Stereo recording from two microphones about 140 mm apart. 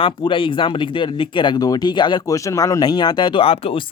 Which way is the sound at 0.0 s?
35° left (ahead or behind).